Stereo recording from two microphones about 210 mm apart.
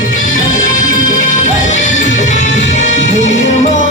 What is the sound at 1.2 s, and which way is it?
Music, 35° left (ahead or behind).